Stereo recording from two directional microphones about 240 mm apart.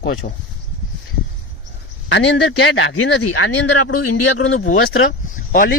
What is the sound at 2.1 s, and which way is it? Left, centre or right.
Speech, left.